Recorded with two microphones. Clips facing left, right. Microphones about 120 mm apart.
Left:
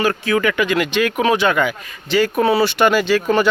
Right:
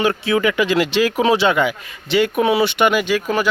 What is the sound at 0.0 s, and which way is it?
Speech, 20° right (ahead or behind).